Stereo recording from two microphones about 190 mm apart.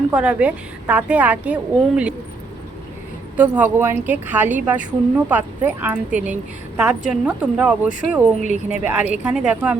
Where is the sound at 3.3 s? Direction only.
10° right (ahead or behind).